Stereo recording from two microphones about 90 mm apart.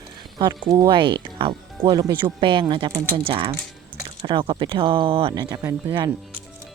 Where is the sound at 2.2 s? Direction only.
65° right (ahead or behind); by 5.4 s 85° right.